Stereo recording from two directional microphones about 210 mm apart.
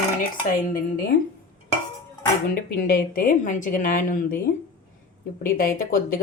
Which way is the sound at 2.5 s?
40° left (ahead or behind).